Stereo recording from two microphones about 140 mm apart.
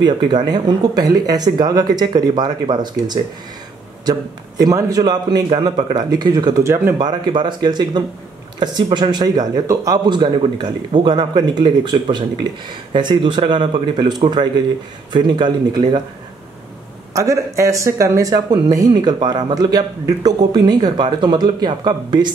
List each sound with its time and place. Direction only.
0.0 s speech: 30° right (ahead or behind)
7.0 s speech: 30° right (ahead or behind)
17.1 s speech: 25° right (ahead or behind)